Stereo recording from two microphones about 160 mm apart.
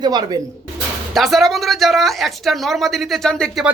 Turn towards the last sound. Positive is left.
turn(degrees=5)  # may be behind; listen again after turning